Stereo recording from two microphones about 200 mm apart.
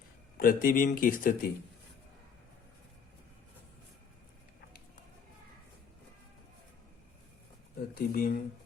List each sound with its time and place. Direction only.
0.3 s speech: 45° left (ahead or behind)
7.9 s speech: 45° left (ahead or behind)